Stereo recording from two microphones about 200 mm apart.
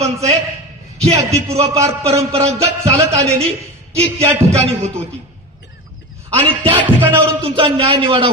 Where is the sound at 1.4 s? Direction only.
30° right (ahead or behind).